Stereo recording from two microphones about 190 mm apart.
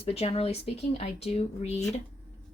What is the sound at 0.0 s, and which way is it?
Speech, 30° left (ahead or behind).